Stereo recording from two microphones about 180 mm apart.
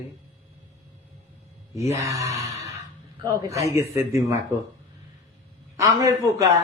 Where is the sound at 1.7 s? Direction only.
15° right (ahead or behind).